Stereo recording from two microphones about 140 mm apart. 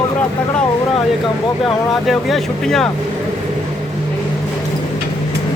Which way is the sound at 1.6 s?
Centre (ahead or behind).